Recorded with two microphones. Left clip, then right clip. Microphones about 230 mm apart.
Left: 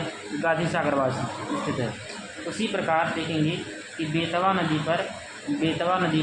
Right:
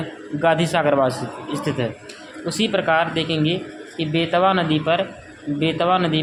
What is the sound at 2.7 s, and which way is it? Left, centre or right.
Speech, right.